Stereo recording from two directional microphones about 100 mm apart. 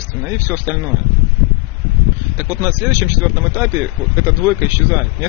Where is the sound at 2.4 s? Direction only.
30° right (ahead or behind).